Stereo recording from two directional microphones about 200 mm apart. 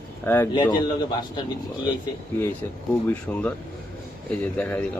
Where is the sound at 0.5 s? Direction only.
20° left (ahead or behind).